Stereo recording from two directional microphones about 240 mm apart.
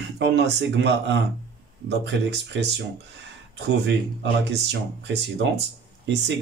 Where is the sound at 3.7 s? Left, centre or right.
Right.